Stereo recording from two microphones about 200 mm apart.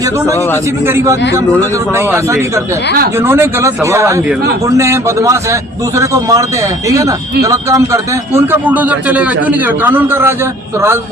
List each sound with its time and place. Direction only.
0.9 s a man's voice: 15° right (ahead or behind)